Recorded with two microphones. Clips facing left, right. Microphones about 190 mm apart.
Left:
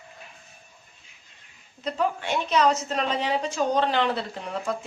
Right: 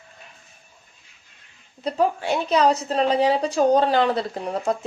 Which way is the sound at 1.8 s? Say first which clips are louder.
Right 5 dB; 35° right (ahead or behind).